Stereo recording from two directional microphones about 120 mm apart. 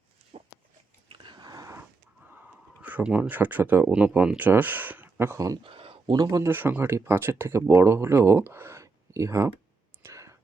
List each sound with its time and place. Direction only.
1.0 s a sound: 45° right (ahead or behind)
2.8 s speech: 10° right (ahead or behind)
5.6 s speech: 45° right (ahead or behind); by 6.5 s 30° right (ahead or behind)
6.5 s speech: 15° right (ahead or behind)
10.0 s clicking: 25° right (ahead or behind)